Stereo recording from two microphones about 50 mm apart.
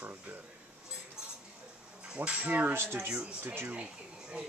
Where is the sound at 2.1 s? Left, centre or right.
Right.